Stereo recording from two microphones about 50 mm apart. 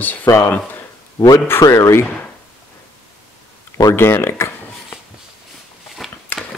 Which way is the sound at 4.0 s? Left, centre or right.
Left.